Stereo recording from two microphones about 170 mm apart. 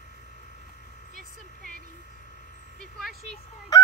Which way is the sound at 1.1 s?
5° left (ahead or behind).